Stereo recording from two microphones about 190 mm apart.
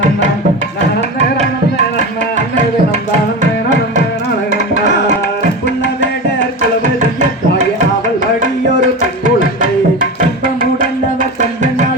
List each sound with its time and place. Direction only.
7.0 s music: 40° right (ahead or behind)
9.2 s tabla: 45° right (ahead or behind)